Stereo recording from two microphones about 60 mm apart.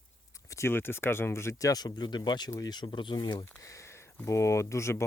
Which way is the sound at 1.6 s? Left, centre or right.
Left.